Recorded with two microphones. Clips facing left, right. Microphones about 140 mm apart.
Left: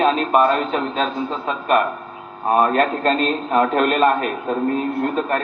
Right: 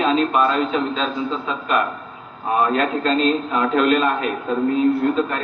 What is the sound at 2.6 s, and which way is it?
A man's voice, 50° left (ahead or behind).